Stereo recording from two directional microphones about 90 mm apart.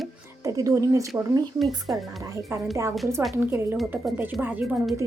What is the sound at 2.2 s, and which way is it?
Speech, 35° right (ahead or behind).